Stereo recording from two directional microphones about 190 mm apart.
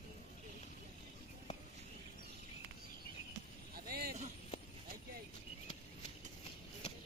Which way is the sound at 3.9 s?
55° right (ahead or behind).